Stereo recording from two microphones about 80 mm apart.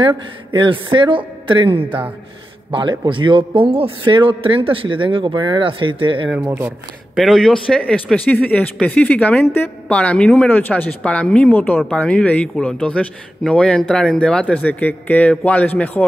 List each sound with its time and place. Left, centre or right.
0.5 s a man's voice: right
1.9 s speech: centre
2.7 s a man's voice: right
7.2 s speech: centre; by 16.1 s left